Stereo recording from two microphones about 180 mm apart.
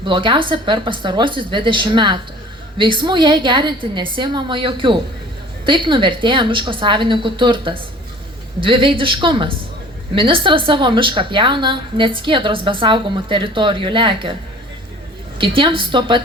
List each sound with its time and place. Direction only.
0.0 s a woman's voice: 25° right (ahead or behind)
15.4 s a woman's voice: 30° right (ahead or behind)